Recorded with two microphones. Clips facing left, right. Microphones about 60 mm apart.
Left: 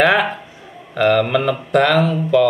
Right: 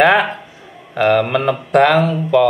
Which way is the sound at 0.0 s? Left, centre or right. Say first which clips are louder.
Right 2 dB; centre.